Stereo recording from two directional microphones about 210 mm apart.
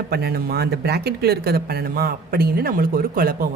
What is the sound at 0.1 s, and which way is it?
Speech, 50° right (ahead or behind).